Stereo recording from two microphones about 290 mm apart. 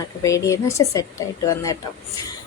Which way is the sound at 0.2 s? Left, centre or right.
Centre.